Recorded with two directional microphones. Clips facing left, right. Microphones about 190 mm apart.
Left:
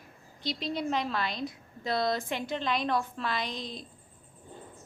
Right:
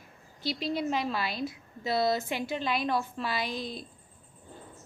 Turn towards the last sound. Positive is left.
turn(degrees=-5)  # may be behind; listen again after turning